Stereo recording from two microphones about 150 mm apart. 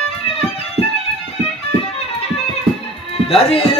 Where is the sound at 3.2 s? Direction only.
40° left (ahead or behind).